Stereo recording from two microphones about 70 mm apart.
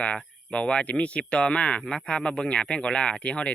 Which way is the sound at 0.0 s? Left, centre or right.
Centre.